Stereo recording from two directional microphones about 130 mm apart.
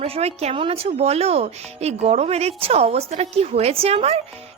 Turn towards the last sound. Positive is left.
turn(degrees=-50)  # may be behind; listen again after turning